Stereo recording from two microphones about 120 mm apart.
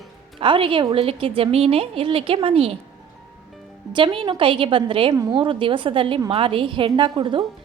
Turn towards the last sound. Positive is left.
turn(degrees=-45)  # may be behind; listen again after turning